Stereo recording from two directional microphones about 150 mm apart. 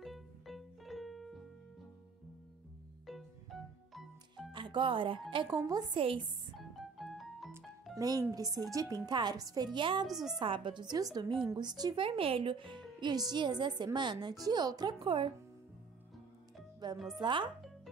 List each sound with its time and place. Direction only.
0.0 s music: centre (ahead or behind)
3.1 s music: centre (ahead or behind)
4.5 s music: 30° right (ahead or behind)
5.3 s speech: 30° right (ahead or behind)
6.5 s music: centre (ahead or behind)
7.9 s music: 25° right (ahead or behind)
8.4 s speech: 25° right (ahead or behind)
10.0 s a woman's voice: centre (ahead or behind)
10.4 s speech: 35° right (ahead or behind)
16.8 s speech: 25° right (ahead or behind)